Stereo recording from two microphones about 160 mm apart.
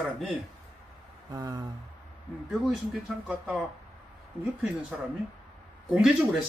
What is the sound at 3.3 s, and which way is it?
Speech, 5° right (ahead or behind).